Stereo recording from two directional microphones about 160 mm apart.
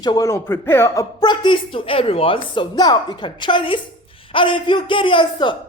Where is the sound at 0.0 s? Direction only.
25° left (ahead or behind).